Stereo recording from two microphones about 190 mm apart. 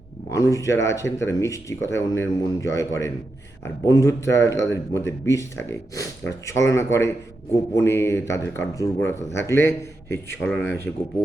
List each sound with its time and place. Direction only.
0.3 s a man's voice: 15° left (ahead or behind)